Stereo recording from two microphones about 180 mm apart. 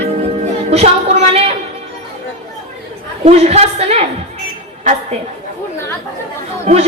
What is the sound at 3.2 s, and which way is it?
Speech, 35° right (ahead or behind).